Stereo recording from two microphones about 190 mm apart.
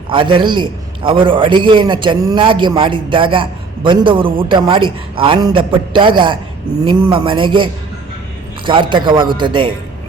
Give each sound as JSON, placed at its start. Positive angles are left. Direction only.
{"t": 0.1, "sound": "a man's voice", "side_deg": -25}